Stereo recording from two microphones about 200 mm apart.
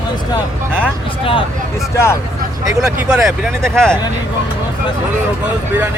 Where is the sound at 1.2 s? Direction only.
25° left (ahead or behind).